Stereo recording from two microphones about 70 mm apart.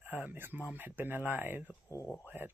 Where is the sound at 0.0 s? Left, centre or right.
Right.